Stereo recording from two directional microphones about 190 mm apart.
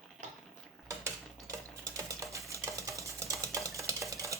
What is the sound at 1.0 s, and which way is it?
Mechanisms, 15° right (ahead or behind).